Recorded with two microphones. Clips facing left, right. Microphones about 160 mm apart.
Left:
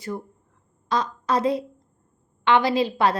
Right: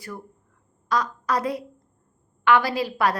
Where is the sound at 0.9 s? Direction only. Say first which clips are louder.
Left 1 dB; 25° left (ahead or behind).